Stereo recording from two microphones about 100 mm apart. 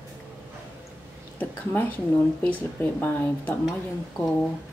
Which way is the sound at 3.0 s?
20° left (ahead or behind).